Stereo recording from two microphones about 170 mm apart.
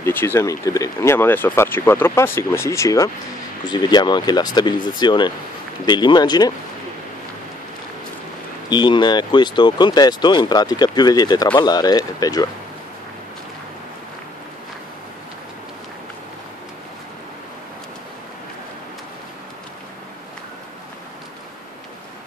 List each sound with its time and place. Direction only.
0.0 s speech: 15° left (ahead or behind)
8.6 s speech: 25° left (ahead or behind)